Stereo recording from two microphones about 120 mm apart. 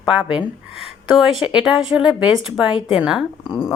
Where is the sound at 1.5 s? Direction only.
5° right (ahead or behind).